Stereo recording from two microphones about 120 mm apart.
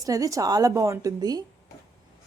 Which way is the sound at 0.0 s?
30° right (ahead or behind).